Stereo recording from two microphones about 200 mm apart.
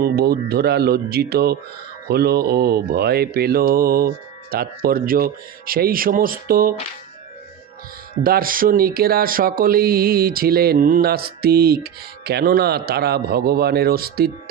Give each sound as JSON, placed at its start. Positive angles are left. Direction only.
{"t": 0.0, "sound": "speech", "side_deg": -50}
{"t": 8.2, "sound": "speech", "side_deg": -45}